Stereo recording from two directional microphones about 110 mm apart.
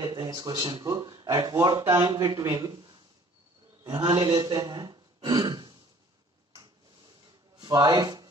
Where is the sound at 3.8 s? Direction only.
40° right (ahead or behind).